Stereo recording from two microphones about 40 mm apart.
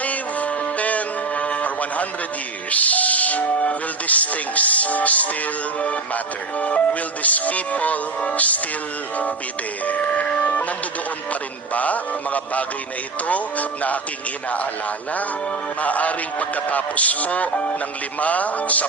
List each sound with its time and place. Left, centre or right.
0.0 s music: left
2.6 s speech: left
6.6 s speech: left
9.8 s speech: left
11.7 s speech: left
15.8 s speech: left